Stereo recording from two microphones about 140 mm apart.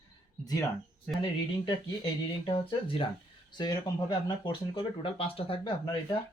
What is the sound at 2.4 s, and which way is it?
Speech, 40° left (ahead or behind).